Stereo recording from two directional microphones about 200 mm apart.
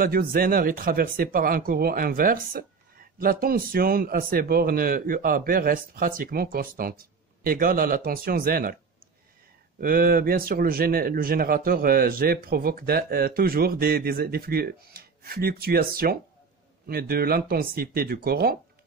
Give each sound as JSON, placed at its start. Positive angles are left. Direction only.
{"t": 0.0, "sound": "speech", "side_deg": -45}
{"t": 9.8, "sound": "speech", "side_deg": -45}